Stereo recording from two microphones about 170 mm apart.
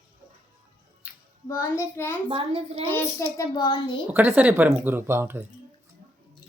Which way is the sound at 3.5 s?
25° left (ahead or behind).